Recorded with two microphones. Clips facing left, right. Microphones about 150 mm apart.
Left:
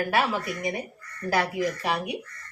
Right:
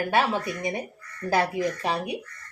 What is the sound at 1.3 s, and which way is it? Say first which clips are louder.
Speech: right 1 dB; 25° right (ahead or behind).